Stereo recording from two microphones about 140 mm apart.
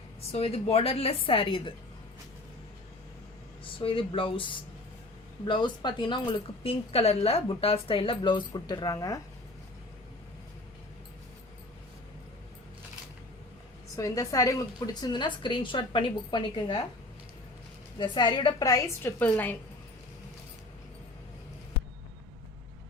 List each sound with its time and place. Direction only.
0.2 s a woman's voice: 45° left (ahead or behind)
3.6 s speech: 40° left (ahead or behind)
13.9 s speech: 25° left (ahead or behind)
17.9 s speech: 35° left (ahead or behind)
19.2 s a woman's voice: 10° left (ahead or behind)